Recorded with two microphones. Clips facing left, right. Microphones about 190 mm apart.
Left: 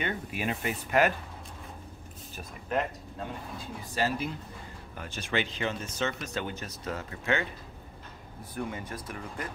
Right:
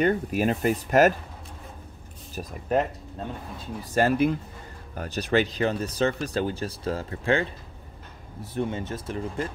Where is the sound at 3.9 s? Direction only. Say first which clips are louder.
Right 9 dB; 55° right (ahead or behind).